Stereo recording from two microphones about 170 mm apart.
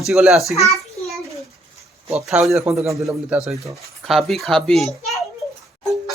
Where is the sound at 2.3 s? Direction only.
Centre (ahead or behind).